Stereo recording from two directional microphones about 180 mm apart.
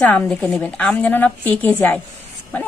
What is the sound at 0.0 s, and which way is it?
A woman's voice, 5° left (ahead or behind).